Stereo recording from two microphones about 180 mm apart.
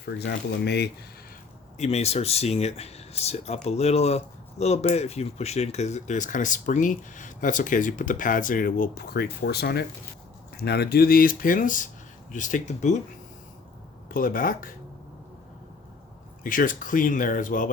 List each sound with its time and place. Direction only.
0.0 s speech: 65° left (ahead or behind)
1.8 s speech: 35° left (ahead or behind)
14.1 s speech: 50° left (ahead or behind)
16.4 s speech: 50° left (ahead or behind)